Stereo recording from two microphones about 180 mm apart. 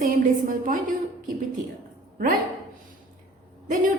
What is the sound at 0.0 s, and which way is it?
Speech, 45° right (ahead or behind).